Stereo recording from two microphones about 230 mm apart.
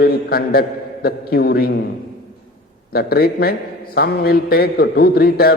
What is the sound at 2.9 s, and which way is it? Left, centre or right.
A man's voice, left.